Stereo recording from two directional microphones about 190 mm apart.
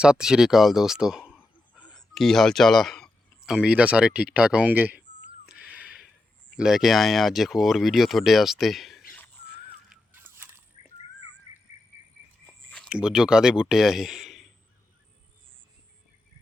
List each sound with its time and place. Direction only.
0.0 s speech: 5° right (ahead or behind)
5.5 s cat: 5° right (ahead or behind)
6.6 s speech: 5° right (ahead or behind)
9.9 s a sound: 10° right (ahead or behind)
10.8 s a sound: 35° left (ahead or behind)
12.5 s speech: 5° left (ahead or behind)